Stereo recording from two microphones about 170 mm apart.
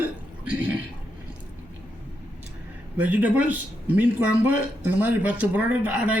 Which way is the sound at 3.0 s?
10° right (ahead or behind).